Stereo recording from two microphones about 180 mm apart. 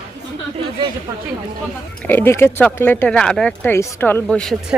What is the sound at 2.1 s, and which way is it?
Speech, 10° left (ahead or behind).